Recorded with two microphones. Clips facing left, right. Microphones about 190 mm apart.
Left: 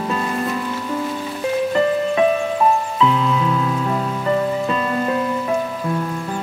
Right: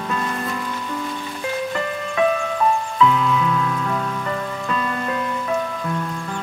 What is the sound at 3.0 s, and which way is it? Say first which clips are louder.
Rain on surface: even; 25° left (ahead or behind).